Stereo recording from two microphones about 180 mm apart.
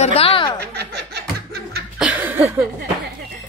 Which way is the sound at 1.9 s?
5° right (ahead or behind).